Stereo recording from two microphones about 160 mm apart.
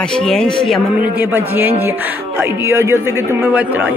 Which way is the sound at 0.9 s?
10° right (ahead or behind).